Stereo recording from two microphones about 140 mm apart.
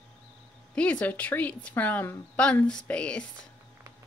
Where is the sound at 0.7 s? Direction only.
10° left (ahead or behind).